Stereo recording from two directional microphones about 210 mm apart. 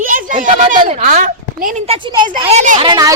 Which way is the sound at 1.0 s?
40° right (ahead or behind).